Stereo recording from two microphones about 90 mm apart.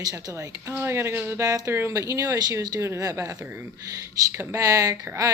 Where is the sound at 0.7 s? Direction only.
30° right (ahead or behind).